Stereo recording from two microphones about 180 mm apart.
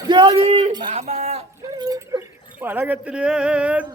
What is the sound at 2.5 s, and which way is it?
Speech, 10° right (ahead or behind).